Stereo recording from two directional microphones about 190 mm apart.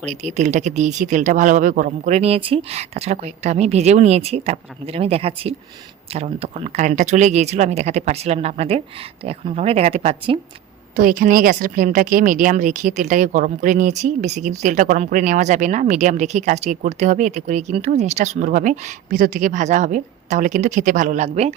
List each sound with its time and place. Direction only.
0.0 s a woman's voice: 40° right (ahead or behind)
10.9 s a woman's voice: 45° right (ahead or behind)